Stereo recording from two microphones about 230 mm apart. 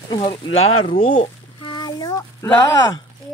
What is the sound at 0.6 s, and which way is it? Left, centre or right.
Speech, left.